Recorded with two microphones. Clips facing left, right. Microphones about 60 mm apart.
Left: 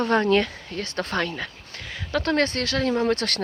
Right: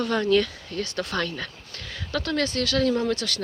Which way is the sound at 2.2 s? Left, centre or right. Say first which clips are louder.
Left 3 dB; left.